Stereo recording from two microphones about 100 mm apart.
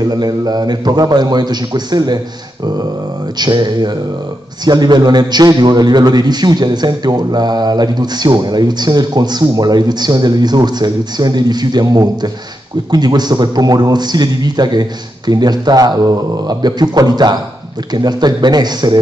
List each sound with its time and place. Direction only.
0.0 s a man's voice: 40° right (ahead or behind)
3.3 s a man's voice: 45° right (ahead or behind)